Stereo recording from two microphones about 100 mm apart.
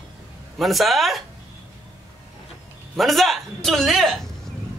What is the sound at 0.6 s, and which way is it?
Speech, centre (ahead or behind).